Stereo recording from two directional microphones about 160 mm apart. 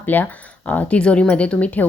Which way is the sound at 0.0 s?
10° left (ahead or behind).